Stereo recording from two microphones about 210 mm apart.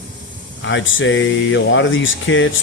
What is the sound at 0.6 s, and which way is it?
Speech, 60° left (ahead or behind).